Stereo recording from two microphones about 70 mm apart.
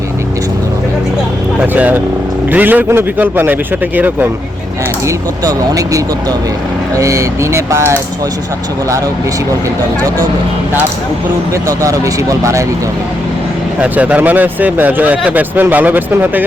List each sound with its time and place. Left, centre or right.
1.6 s speech: right
5.0 s speech: right
11.5 s speech: right
13.8 s speech: centre